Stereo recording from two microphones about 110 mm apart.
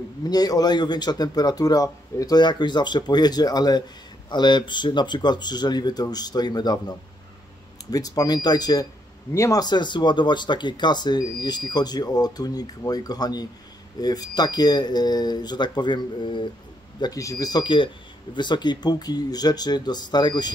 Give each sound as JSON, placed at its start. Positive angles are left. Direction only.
{"t": 0.2, "sound": "speech", "side_deg": 35}
{"t": 17.0, "sound": "speech", "side_deg": 35}